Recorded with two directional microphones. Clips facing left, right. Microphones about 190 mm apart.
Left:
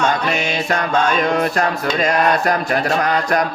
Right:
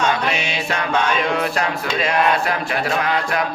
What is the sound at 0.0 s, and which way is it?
Music, 45° left (ahead or behind).